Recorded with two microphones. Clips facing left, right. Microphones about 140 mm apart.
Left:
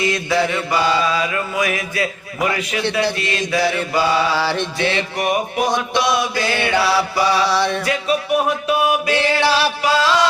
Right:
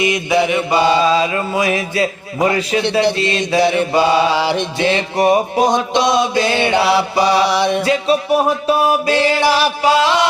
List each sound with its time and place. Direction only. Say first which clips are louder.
0.0 s mantra: right 3 dB; 20° right (ahead or behind)
5.1 s mantra: right 6 dB; 30° right (ahead or behind)
7.8 s music: right 5 dB; 30° right (ahead or behind)
9.1 s music: right 3 dB; 15° right (ahead or behind)